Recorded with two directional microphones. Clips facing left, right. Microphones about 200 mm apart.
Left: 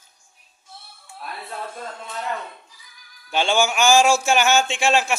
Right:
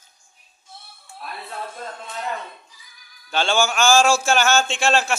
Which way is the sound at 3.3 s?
15° left (ahead or behind).